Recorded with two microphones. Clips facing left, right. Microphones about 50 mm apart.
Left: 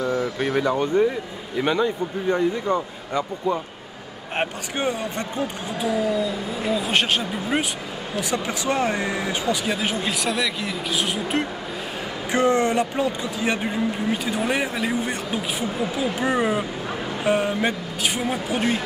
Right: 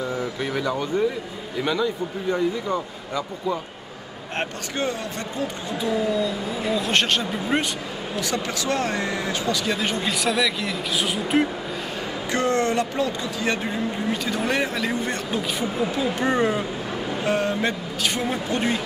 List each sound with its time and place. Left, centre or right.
0.4 s speech: centre
6.7 s speech: centre
8.2 s speech: centre
9.8 s a man's voice: centre
12.3 s a man's voice: centre